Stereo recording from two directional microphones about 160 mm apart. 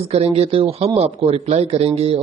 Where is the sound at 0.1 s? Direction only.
40° right (ahead or behind).